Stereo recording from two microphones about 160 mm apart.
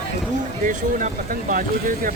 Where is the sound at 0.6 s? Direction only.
55° right (ahead or behind).